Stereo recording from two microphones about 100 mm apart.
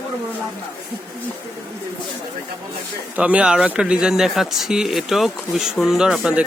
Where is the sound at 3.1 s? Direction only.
10° right (ahead or behind).